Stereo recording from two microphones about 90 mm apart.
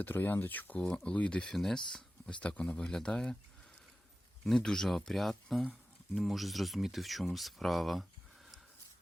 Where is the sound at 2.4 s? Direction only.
15° left (ahead or behind).